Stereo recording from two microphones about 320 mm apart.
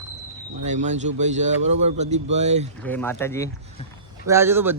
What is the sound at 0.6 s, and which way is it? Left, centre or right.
A man's voice, right.